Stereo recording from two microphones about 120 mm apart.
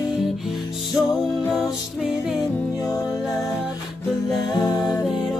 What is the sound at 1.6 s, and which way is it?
Music, 5° right (ahead or behind).